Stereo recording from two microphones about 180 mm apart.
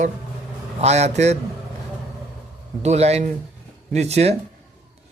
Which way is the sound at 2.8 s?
35° right (ahead or behind).